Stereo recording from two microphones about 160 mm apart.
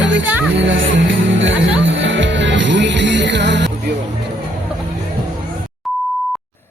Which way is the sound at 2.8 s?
90° right.